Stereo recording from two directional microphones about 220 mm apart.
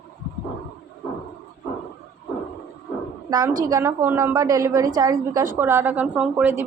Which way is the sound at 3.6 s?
15° right (ahead or behind).